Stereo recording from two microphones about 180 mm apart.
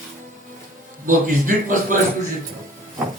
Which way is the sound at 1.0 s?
50° right (ahead or behind).